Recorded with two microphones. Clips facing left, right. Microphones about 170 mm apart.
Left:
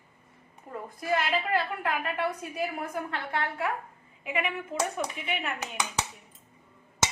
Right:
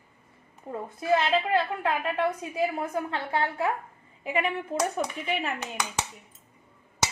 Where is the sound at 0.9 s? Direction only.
25° right (ahead or behind).